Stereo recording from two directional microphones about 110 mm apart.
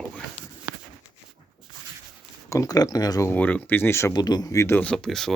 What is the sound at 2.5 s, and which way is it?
Speech, 35° left (ahead or behind).